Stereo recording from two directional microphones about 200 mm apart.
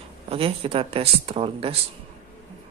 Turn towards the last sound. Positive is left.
turn(degrees=-30)  # may be behind; listen again after turning